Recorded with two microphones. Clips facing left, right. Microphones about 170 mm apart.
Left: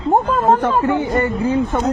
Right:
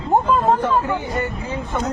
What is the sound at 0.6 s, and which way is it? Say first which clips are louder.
Speech: left 4 dB; 65° left (ahead or behind).